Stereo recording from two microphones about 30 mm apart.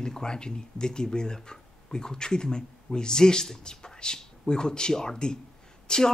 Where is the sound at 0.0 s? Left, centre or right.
Left.